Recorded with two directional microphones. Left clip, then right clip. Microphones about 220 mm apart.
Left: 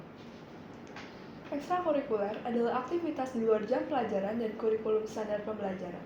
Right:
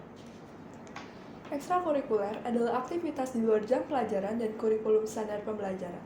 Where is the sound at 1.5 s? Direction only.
35° right (ahead or behind).